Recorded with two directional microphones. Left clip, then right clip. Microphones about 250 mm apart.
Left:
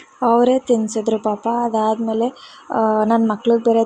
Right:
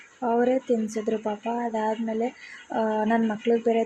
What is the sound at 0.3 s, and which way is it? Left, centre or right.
Speech, left.